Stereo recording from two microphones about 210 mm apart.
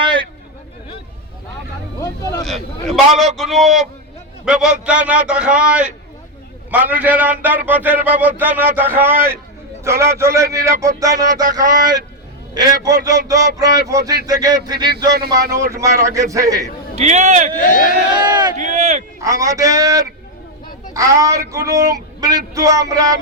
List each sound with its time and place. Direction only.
0.0 s a sound: 25° right (ahead or behind)
2.4 s a man's voice: centre (ahead or behind); by 16.6 s 15° right (ahead or behind)
16.9 s speech: 35° right (ahead or behind)
17.6 s speech: 40° left (ahead or behind)
18.2 s speech: 20° right (ahead or behind)
18.5 s speech: 35° right (ahead or behind)
19.2 s speech: 15° right (ahead or behind)